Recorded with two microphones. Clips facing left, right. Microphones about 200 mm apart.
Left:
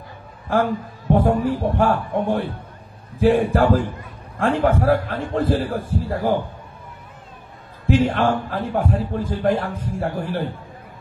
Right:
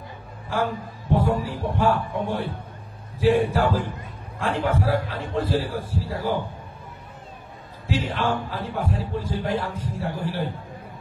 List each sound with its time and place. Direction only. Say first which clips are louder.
0.5 s a man's voice: left 6 dB; 55° left (ahead or behind)
7.8 s a man's voice: left 8 dB; 50° left (ahead or behind)